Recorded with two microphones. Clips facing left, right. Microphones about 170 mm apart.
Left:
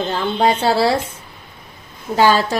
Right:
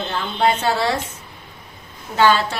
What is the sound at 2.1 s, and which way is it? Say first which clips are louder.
Speech: left 2 dB; 40° left (ahead or behind).